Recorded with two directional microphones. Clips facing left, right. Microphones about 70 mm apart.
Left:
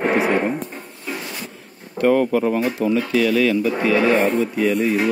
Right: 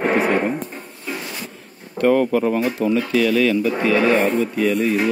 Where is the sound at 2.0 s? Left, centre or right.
Centre.